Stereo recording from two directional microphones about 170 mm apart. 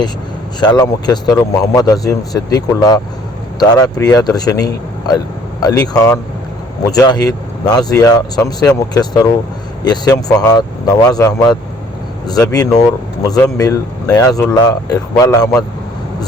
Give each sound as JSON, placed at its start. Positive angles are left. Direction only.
{"t": 0.6, "sound": "speech", "side_deg": 25}